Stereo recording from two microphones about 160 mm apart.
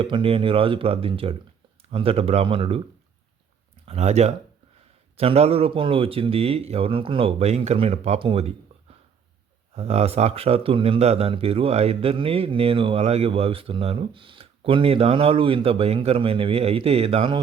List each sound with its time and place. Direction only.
0.0 s speech: 35° right (ahead or behind)
3.8 s speech: 40° right (ahead or behind)